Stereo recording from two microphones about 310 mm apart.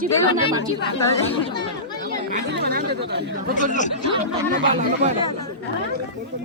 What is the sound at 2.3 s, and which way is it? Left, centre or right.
Speech, right.